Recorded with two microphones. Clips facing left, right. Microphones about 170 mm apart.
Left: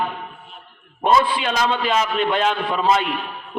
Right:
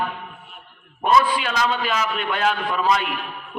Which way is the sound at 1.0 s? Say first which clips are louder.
Left 1 dB; 25° left (ahead or behind).